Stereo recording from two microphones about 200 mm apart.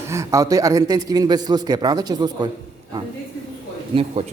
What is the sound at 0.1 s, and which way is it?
A man's voice, 15° right (ahead or behind).